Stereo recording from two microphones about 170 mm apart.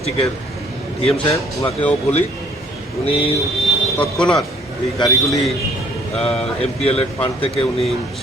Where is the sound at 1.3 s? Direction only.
15° left (ahead or behind).